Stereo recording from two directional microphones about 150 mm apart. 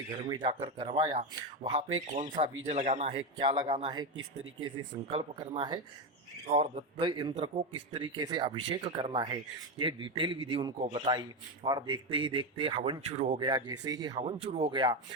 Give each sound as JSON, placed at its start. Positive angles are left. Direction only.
{"t": 0.3, "sound": "speech", "side_deg": -30}
{"t": 2.3, "sound": "speech", "side_deg": -35}
{"t": 2.7, "sound": "speech", "side_deg": -50}
{"t": 5.1, "sound": "speech", "side_deg": -30}
{"t": 7.3, "sound": "speech", "side_deg": -45}
{"t": 13.0, "sound": "speech", "side_deg": -45}
{"t": 13.4, "sound": "speech", "side_deg": -25}